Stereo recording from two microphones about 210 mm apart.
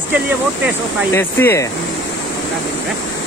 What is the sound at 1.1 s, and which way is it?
Speech, 10° left (ahead or behind).